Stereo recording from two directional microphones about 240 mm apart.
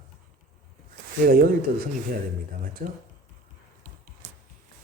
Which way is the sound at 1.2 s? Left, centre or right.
Right.